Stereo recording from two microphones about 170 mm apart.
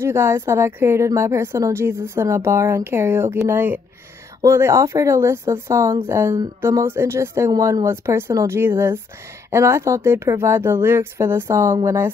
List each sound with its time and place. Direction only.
0.0 s a woman's voice: 15° right (ahead or behind)